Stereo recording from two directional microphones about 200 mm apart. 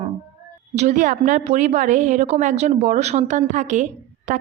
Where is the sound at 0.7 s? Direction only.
35° right (ahead or behind).